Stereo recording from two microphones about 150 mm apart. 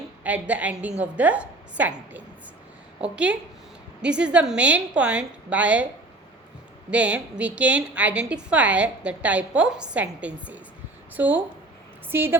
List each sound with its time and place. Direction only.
0.3 s a woman's voice: 10° right (ahead or behind)
6.9 s a woman's voice: 10° right (ahead or behind)